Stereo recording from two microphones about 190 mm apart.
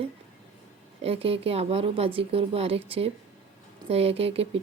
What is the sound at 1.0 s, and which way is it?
Speech, 30° right (ahead or behind).